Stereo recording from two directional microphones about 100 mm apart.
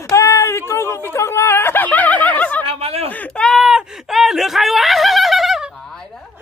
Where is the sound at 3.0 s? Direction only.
15° left (ahead or behind).